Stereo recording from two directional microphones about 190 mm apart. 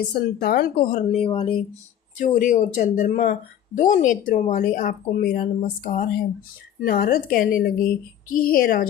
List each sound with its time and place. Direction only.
0.1 s a woman's voice: 55° left (ahead or behind); by 1.6 s 25° left (ahead or behind)
2.1 s a woman's voice: 40° left (ahead or behind)